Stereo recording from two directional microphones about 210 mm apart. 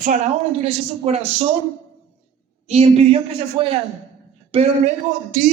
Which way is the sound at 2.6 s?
30° right (ahead or behind).